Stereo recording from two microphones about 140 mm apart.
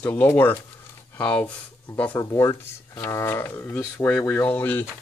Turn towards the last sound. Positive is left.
turn(degrees=15)  # may be behind; listen again after turning